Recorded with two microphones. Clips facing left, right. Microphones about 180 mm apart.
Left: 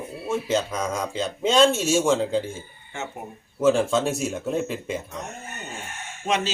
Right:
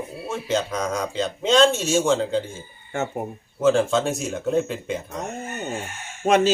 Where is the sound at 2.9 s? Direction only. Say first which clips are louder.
Right 8 dB; 50° right (ahead or behind).